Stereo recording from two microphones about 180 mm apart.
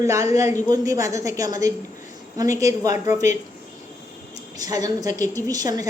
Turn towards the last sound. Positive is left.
turn(degrees=-20)  # may be behind; listen again after turning